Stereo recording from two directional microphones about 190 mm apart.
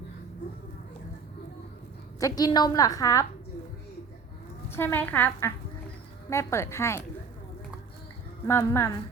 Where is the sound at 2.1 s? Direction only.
20° left (ahead or behind).